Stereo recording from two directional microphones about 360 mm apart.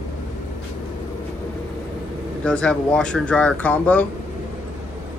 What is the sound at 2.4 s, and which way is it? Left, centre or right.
Speech, centre.